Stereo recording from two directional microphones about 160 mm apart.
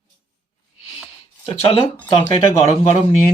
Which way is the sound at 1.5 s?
40° left (ahead or behind).